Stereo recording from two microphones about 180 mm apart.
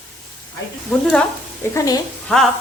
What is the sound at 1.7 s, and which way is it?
Speech, 20° left (ahead or behind).